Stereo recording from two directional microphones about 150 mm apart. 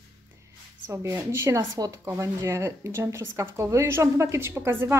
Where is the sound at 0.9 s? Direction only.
20° right (ahead or behind).